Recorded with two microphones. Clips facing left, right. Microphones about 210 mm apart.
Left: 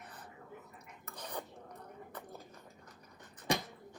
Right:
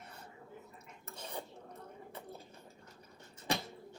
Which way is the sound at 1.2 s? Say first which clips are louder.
Left 1 dB; 25° right (ahead or behind).